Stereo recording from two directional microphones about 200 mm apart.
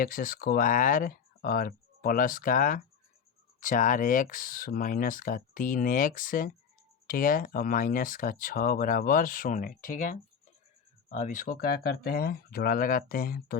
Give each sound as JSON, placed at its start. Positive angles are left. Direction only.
{"t": 0.0, "sound": "speech", "side_deg": 45}